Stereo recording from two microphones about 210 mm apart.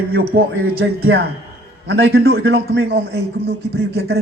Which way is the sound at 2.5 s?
60° right (ahead or behind).